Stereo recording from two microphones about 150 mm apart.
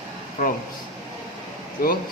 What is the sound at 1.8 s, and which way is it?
Speech, 70° left (ahead or behind).